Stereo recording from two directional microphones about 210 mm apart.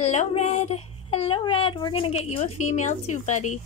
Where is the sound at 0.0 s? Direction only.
35° left (ahead or behind).